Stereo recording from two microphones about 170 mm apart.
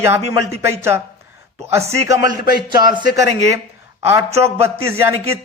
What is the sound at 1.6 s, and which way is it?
Speech, 15° right (ahead or behind).